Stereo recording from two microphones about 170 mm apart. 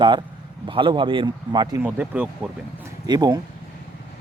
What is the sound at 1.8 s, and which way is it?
Speech, 10° right (ahead or behind).